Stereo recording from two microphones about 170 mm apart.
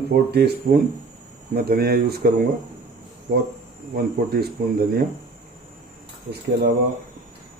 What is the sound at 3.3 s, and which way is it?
Speech, 55° right (ahead or behind).